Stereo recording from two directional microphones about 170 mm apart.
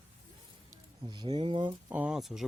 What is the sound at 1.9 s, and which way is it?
Speech, 5° right (ahead or behind).